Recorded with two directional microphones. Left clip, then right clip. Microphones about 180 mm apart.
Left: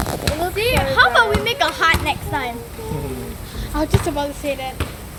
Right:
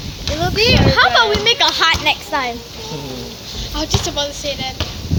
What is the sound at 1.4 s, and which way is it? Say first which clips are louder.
Speech: right 4 dB; 20° right (ahead or behind).